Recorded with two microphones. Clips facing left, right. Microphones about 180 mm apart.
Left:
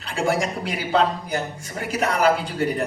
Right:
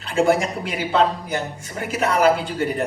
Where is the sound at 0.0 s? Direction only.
35° left (ahead or behind).